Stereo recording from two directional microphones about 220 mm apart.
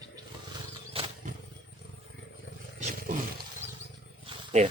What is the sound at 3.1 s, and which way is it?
Roaring cats, 40° right (ahead or behind).